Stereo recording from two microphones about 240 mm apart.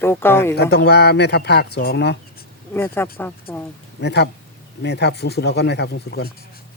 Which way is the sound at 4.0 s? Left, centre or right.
Left.